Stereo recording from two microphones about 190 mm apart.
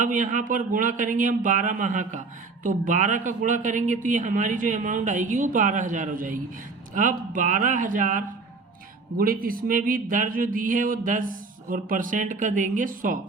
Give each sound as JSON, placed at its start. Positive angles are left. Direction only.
{"t": 0.0, "sound": "speech", "side_deg": -40}